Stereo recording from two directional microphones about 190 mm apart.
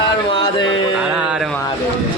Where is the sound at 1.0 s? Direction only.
5° right (ahead or behind).